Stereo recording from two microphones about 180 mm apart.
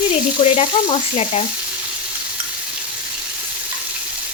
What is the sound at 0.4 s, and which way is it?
Frying, 35° left (ahead or behind).